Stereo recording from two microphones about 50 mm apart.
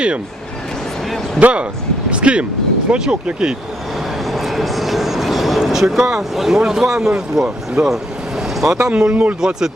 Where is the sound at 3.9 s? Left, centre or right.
Centre.